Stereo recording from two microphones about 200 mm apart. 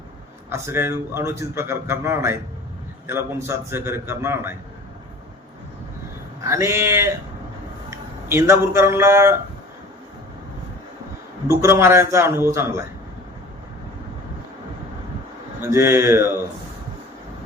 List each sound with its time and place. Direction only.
0.5 s a man's voice: 10° right (ahead or behind)
6.4 s a man's voice: 15° right (ahead or behind)
11.4 s a man's voice: 15° right (ahead or behind)
15.6 s a man's voice: 10° right (ahead or behind)